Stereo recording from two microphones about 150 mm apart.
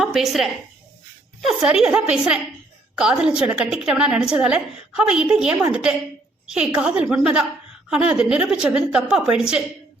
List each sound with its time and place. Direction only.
0.0 s a woman's voice: centre (ahead or behind)